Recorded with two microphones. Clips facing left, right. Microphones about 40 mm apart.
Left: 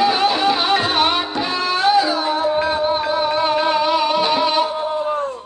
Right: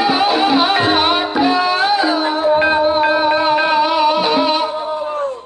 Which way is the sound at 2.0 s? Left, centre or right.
Right.